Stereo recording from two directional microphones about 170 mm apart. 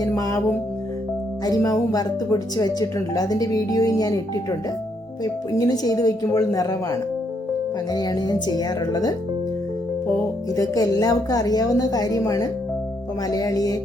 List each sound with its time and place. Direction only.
0.2 s speech: 20° left (ahead or behind)
1.5 s speech: 20° left (ahead or behind)
5.2 s speech: 20° left (ahead or behind)
10.5 s speech: 20° left (ahead or behind)